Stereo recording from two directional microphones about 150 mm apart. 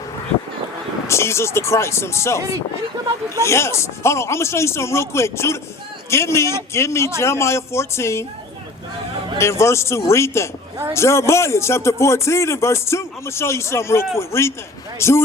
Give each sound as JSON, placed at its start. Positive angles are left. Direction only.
{"t": 1.0, "sound": "speech", "side_deg": 20}
{"t": 3.4, "sound": "speech", "side_deg": 20}
{"t": 9.4, "sound": "a man's voice", "side_deg": 20}